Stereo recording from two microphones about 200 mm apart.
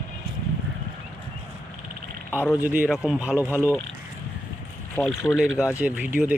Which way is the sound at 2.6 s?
5° right (ahead or behind).